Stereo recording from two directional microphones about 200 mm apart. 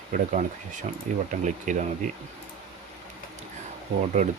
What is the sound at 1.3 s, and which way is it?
Speech, 40° right (ahead or behind).